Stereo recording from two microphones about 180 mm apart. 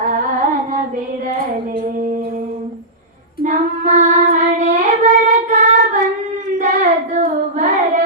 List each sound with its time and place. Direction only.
0.0 s a sound: 45° right (ahead or behind)
3.4 s child singing: 45° right (ahead or behind)
6.6 s singing: 45° right (ahead or behind)